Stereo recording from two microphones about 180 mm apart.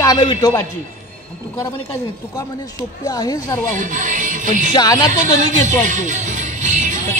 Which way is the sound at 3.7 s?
45° right (ahead or behind).